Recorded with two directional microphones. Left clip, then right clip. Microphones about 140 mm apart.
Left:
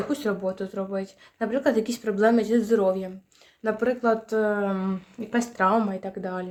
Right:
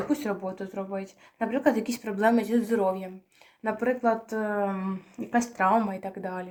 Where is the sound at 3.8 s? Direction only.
45° left (ahead or behind); by 4.8 s 60° left (ahead or behind).